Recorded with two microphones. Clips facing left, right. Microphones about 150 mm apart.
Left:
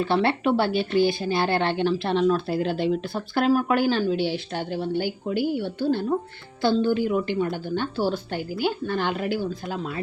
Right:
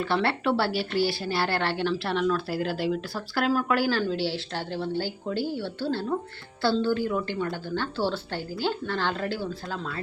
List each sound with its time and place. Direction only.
0.0 s a woman's voice: 20° left (ahead or behind)